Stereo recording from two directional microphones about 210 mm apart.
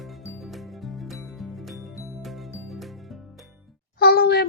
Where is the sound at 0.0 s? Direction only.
Centre (ahead or behind).